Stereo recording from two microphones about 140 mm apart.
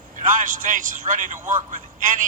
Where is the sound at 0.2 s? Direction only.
70° right (ahead or behind).